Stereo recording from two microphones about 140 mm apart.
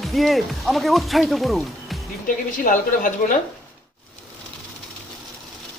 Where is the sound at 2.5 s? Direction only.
70° left (ahead or behind).